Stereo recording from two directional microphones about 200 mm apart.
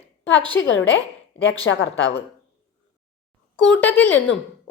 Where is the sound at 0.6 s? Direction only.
65° left (ahead or behind).